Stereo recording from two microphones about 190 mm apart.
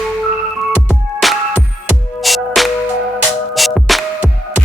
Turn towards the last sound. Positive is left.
turn(degrees=0)  # may be behind; listen again after turning